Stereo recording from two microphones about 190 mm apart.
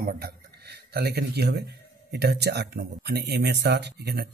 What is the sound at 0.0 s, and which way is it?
A man's voice, 50° right (ahead or behind).